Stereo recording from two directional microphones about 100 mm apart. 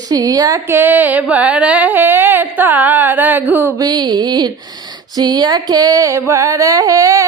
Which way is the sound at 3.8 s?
45° right (ahead or behind).